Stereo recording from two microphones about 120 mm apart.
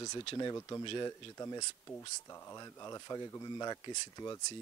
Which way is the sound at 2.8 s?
25° left (ahead or behind).